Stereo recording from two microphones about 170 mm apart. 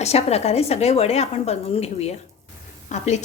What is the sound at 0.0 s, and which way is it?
A woman's voice, 40° left (ahead or behind).